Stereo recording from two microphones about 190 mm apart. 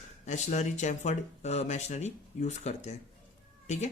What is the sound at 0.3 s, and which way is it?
Speech, 40° left (ahead or behind).